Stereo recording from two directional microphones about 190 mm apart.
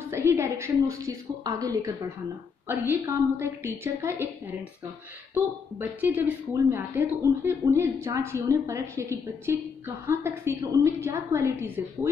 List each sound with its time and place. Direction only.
0.1 s a woman's voice: 15° right (ahead or behind)